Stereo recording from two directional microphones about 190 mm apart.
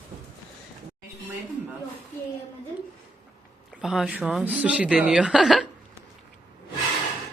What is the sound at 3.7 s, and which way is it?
Speech, centre (ahead or behind).